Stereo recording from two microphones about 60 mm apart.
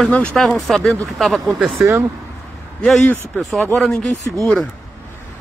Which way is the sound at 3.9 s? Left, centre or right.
Centre.